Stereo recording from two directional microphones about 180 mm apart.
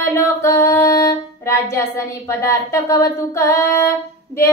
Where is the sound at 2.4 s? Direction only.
15° left (ahead or behind).